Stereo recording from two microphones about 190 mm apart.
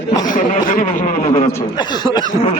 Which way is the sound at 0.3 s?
45° left (ahead or behind).